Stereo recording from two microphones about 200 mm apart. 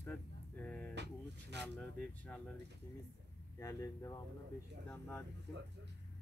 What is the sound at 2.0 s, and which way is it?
Speech, 5° left (ahead or behind).